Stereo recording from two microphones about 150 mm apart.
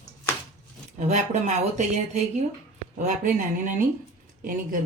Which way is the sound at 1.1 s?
50° right (ahead or behind).